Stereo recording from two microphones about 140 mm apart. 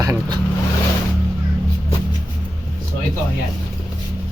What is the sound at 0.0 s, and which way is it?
Vehicle, 25° right (ahead or behind).